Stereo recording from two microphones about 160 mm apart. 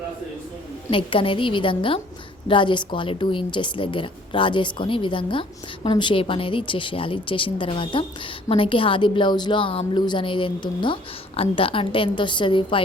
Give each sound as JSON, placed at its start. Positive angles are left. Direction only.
{"t": 0.9, "sound": "a woman's voice", "side_deg": 35}